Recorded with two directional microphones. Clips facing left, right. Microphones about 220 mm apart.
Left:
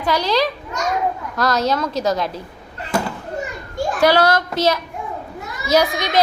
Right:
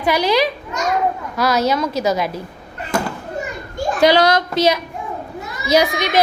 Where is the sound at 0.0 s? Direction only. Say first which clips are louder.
Right 2 dB; 10° right (ahead or behind).